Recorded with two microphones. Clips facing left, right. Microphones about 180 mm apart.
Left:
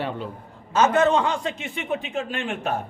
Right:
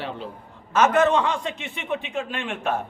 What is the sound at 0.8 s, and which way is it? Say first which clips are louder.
A man's voice: even; 30° left (ahead or behind).